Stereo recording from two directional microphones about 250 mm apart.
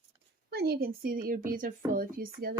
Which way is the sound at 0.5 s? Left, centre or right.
Right.